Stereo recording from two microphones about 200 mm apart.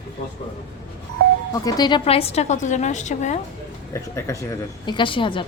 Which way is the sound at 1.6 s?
20° left (ahead or behind).